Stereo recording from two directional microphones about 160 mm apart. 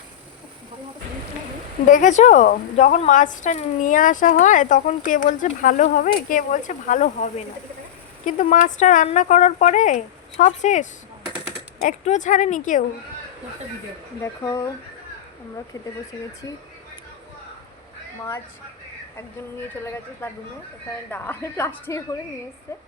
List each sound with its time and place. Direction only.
1.9 s speech: 50° left (ahead or behind)
12.0 s speech: 50° left (ahead or behind)
14.2 s speech: 20° left (ahead or behind)
20.2 s a woman's voice: 15° left (ahead or behind)